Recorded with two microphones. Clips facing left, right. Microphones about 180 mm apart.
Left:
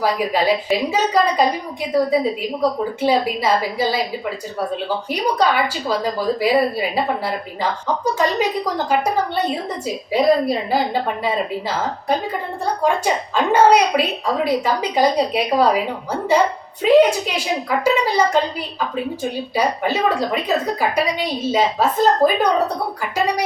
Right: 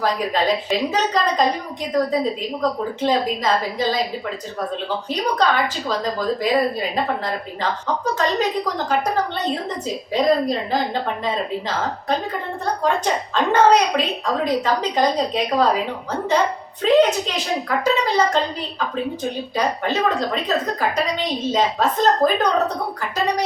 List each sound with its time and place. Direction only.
0.0 s a woman's voice: 10° left (ahead or behind)
5.0 s a woman's voice: 10° left (ahead or behind)
8.9 s a woman's voice: 10° left (ahead or behind)
12.8 s a woman's voice: 10° left (ahead or behind)
16.8 s a woman's voice: 10° left (ahead or behind)
19.5 s a woman's voice: 10° left (ahead or behind)